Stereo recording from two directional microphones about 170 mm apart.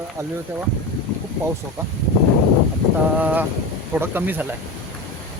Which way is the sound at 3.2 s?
10° right (ahead or behind).